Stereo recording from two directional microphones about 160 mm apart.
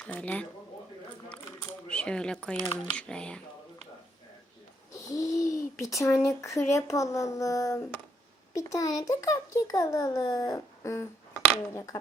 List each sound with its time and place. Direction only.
0.0 s speech: 10° left (ahead or behind)
1.9 s speech: 5° left (ahead or behind)
4.9 s a child's voice: 20° left (ahead or behind)